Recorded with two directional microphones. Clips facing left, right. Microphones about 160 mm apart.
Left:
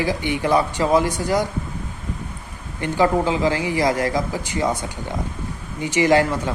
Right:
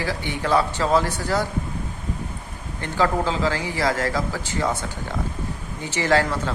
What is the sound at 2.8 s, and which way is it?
Speech, 15° left (ahead or behind).